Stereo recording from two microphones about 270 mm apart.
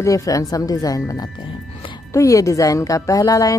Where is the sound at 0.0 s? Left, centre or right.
Centre.